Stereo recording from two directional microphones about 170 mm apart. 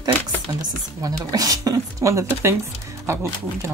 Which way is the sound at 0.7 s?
20° right (ahead or behind).